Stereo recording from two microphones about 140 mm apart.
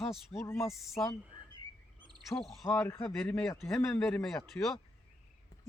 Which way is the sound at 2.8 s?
15° left (ahead or behind).